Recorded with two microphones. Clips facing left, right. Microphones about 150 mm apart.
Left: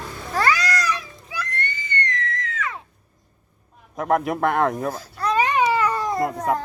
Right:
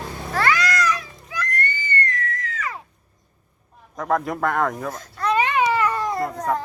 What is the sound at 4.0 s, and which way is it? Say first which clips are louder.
Speech: left 2 dB; 20° left (ahead or behind).